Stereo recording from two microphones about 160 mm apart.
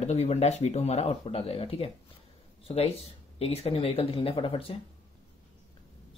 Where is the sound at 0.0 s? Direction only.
45° left (ahead or behind).